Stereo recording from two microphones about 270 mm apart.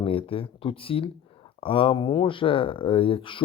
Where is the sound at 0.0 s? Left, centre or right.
Centre.